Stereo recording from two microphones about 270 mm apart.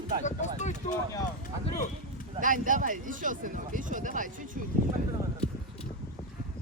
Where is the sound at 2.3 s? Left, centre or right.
Right.